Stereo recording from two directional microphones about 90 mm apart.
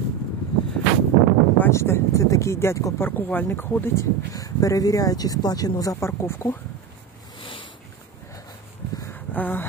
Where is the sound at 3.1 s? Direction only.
20° left (ahead or behind).